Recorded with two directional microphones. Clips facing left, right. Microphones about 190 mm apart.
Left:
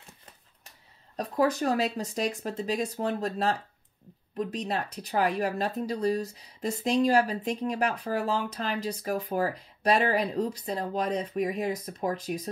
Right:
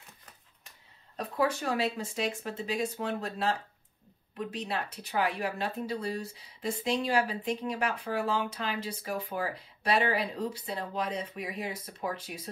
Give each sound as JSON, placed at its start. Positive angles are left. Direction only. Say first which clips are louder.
{"t": 1.1, "sound": "speech", "louder": "left 4 dB", "side_deg": 40}